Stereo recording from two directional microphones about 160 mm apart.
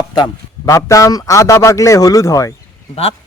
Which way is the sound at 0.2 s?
20° left (ahead or behind).